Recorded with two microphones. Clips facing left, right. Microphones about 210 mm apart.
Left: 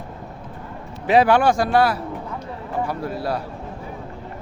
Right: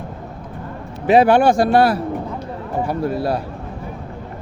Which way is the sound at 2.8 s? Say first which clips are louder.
Right 6 dB; 25° right (ahead or behind).